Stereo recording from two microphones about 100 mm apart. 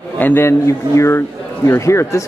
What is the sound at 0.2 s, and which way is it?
A man's voice, 25° left (ahead or behind).